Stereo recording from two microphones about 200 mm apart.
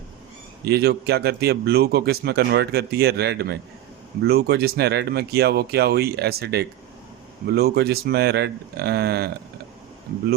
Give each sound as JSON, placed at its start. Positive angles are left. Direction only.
{"t": 0.6, "sound": "a man's voice", "side_deg": -55}